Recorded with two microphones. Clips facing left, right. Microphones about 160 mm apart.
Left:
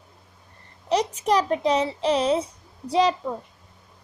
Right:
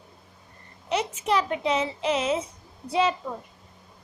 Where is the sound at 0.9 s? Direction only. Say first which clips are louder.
Left 4 dB; 35° left (ahead or behind).